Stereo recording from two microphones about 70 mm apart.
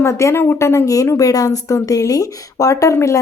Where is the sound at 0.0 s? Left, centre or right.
Left.